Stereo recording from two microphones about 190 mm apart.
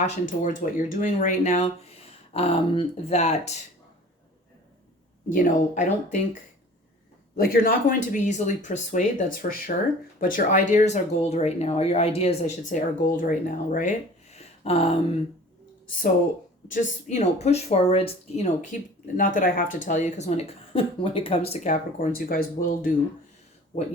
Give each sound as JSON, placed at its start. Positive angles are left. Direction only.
{"t": 0.0, "sound": "speech", "side_deg": 45}
{"t": 5.3, "sound": "speech", "side_deg": 45}
{"t": 7.3, "sound": "speech", "side_deg": 50}
{"t": 16.6, "sound": "speech", "side_deg": 40}